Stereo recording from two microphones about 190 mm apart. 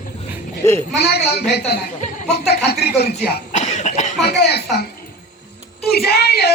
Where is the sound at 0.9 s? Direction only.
55° left (ahead or behind).